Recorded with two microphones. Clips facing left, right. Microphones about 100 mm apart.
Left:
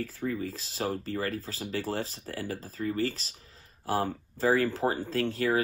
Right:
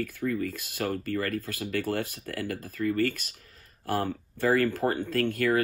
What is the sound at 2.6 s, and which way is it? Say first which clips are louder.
Speech: right 6 dB; 30° left (ahead or behind).